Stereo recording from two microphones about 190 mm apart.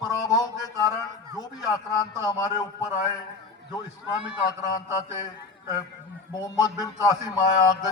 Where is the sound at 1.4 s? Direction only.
20° left (ahead or behind).